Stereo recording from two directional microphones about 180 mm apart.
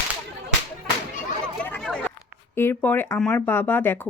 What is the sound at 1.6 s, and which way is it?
Chatter, 5° left (ahead or behind).